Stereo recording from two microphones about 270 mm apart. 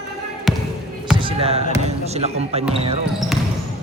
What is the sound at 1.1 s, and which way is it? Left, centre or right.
Speech, centre.